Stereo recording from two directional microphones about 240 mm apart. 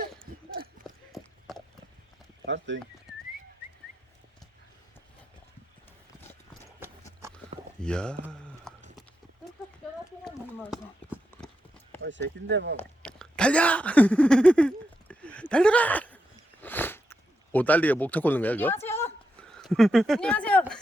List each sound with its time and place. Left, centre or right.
0.9 s clip-clop: centre
2.5 s speech: right
6.8 s clip-clop: centre
7.8 s speech: centre
8.3 s a sound: centre
10.2 s clip-clop: centre
12.0 s speech: right
12.7 s a sound: centre
17.5 s speech: centre
19.4 s a sound: centre